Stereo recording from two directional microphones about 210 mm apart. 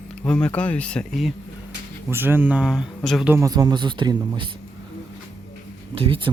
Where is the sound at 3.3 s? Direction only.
15° right (ahead or behind).